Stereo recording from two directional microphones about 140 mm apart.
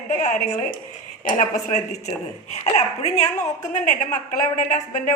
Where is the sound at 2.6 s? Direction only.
55° left (ahead or behind).